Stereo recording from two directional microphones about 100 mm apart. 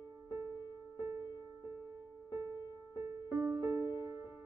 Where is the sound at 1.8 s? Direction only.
35° right (ahead or behind).